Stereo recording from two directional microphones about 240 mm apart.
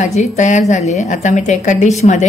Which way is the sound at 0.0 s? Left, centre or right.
Left.